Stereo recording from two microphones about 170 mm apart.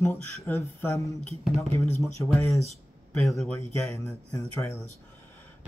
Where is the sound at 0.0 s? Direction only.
15° left (ahead or behind).